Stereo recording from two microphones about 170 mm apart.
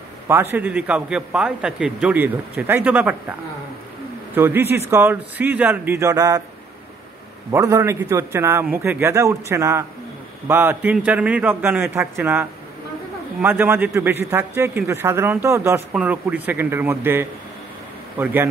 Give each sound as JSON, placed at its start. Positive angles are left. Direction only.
{"t": 0.3, "sound": "speech", "side_deg": -10}
{"t": 4.4, "sound": "speech", "side_deg": -10}
{"t": 7.5, "sound": "speech", "side_deg": -15}